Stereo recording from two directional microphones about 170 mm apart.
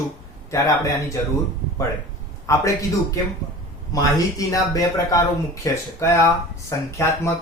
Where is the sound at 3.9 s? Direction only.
20° left (ahead or behind).